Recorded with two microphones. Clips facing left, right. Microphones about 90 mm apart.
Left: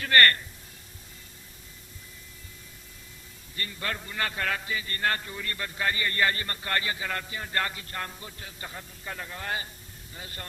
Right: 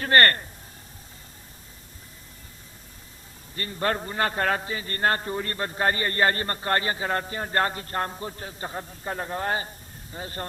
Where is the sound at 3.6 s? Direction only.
35° right (ahead or behind).